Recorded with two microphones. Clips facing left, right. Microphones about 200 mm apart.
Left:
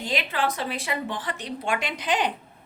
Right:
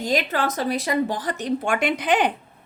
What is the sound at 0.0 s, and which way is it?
A woman's voice, 40° right (ahead or behind).